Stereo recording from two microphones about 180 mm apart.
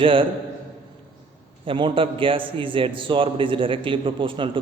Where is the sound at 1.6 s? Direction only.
30° right (ahead or behind).